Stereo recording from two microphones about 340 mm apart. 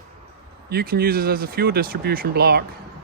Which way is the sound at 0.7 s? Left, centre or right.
Right.